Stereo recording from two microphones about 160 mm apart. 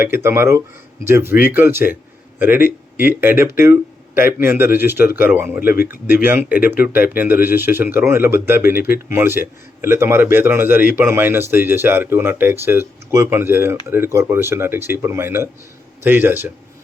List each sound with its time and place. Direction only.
0.0 s speech: 15° right (ahead or behind)